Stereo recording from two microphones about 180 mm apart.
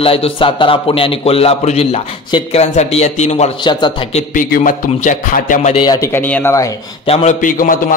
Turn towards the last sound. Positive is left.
turn(degrees=50)  # may be behind; listen again after turning